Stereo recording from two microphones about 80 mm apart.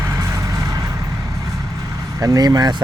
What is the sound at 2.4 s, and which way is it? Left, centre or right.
Speech, right.